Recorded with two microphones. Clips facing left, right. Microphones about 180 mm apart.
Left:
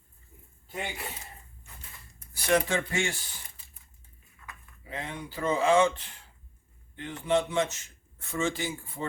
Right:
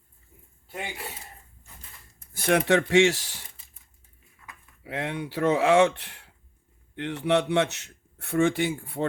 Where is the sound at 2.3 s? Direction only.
55° right (ahead or behind); by 3.4 s 80° right.